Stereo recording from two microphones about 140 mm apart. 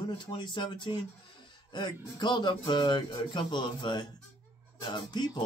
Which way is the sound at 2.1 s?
30° left (ahead or behind).